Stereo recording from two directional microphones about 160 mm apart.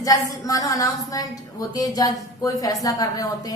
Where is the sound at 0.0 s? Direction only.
20° left (ahead or behind).